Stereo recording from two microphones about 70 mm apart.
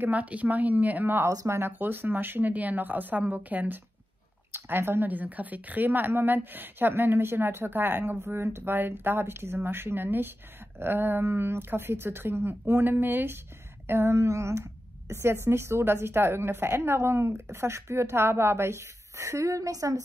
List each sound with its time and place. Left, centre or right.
0.0 s a woman's voice: right